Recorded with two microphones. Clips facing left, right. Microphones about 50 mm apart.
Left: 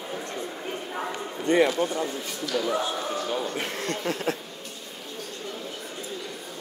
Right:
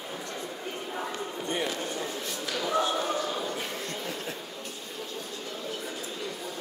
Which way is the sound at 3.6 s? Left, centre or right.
Left.